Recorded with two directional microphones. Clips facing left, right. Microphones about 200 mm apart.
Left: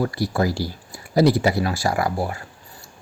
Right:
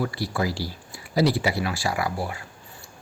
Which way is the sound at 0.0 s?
45° left (ahead or behind).